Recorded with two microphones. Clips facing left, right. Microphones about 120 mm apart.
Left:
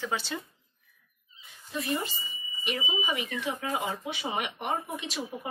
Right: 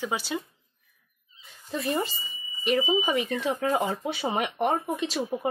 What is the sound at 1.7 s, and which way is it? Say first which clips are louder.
Speech: right 4 dB; 30° right (ahead or behind).